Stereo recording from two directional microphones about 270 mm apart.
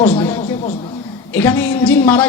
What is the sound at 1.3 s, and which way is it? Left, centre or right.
Speech, centre.